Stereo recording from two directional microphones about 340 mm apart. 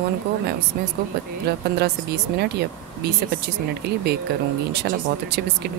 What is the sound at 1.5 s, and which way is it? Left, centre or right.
Speech, right.